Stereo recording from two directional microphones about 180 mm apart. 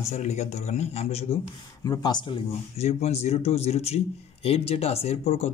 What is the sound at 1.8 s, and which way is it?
Speech, 20° left (ahead or behind).